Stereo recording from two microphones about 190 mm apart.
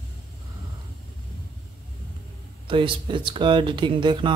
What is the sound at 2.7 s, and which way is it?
Speech, 25° right (ahead or behind).